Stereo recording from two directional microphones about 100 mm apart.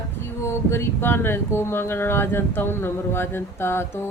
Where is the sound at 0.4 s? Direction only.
25° left (ahead or behind).